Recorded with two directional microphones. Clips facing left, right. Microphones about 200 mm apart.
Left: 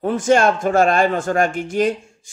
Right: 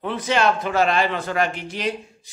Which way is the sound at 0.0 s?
45° left (ahead or behind).